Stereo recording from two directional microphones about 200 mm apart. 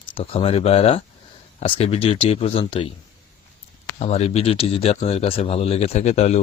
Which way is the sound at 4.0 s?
30° left (ahead or behind).